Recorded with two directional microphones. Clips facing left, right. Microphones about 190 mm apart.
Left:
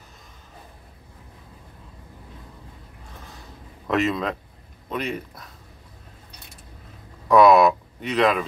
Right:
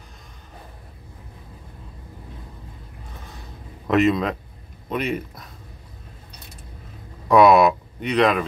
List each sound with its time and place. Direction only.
3.9 s speech: centre (ahead or behind)
7.2 s speech: centre (ahead or behind)